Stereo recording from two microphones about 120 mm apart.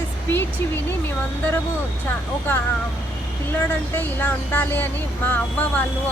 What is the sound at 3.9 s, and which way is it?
Speech, 15° left (ahead or behind).